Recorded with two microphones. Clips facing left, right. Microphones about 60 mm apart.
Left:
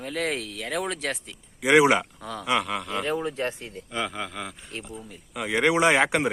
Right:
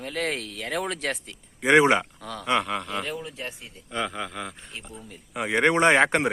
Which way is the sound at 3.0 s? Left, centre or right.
Left.